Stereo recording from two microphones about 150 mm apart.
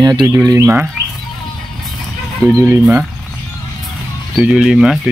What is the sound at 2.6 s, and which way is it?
Speech, 15° right (ahead or behind).